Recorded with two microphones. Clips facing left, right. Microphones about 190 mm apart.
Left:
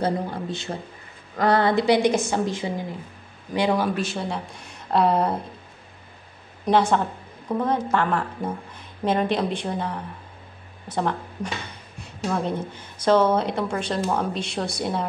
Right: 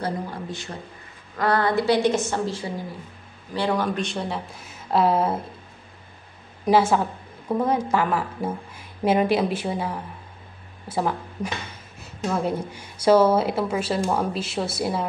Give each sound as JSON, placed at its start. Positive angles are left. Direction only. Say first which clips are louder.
{"t": 0.0, "sound": "a woman's voice", "louder": "left 4 dB", "side_deg": 25}
{"t": 6.6, "sound": "a woman's voice", "louder": "right 1 dB", "side_deg": -5}